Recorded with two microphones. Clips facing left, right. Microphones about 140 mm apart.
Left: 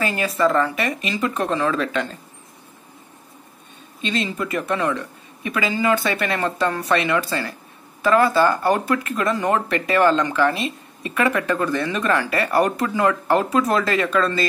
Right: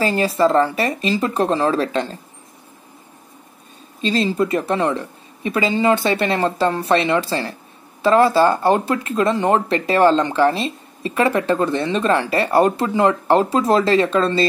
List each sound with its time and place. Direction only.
0.0 s speech: 30° right (ahead or behind)
4.0 s speech: 35° right (ahead or behind)